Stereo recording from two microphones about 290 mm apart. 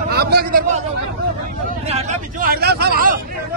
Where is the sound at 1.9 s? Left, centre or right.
Right.